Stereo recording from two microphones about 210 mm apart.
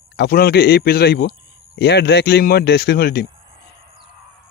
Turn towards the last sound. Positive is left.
turn(degrees=50)  # may be behind; listen again after turning